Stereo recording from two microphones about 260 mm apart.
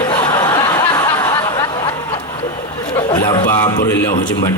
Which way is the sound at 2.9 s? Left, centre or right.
Centre.